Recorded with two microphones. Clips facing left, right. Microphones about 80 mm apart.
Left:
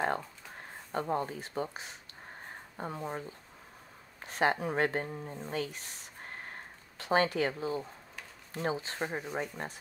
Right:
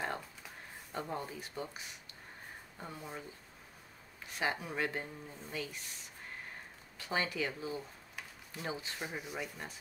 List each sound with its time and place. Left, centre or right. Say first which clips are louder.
0.9 s speech: left 7 dB; left
5.5 s speech: left 5 dB; left